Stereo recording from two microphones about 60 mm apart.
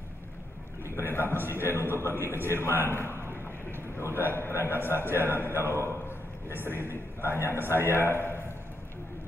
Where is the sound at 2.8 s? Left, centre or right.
Left.